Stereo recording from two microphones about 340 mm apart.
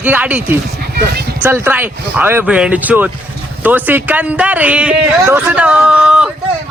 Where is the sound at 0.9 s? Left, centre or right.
Right.